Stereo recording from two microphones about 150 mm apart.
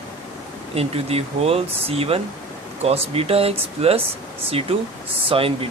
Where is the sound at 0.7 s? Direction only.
40° right (ahead or behind).